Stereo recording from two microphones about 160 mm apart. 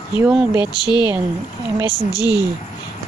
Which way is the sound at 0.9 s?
25° left (ahead or behind).